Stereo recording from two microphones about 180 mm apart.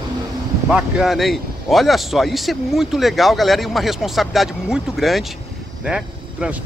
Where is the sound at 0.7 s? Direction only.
5° right (ahead or behind).